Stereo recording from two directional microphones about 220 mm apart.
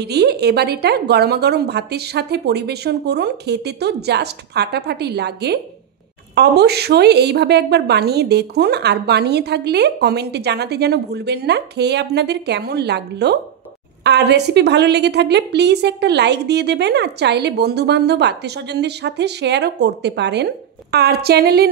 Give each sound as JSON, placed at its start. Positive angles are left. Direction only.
{"t": 0.0, "sound": "a woman's voice", "side_deg": -50}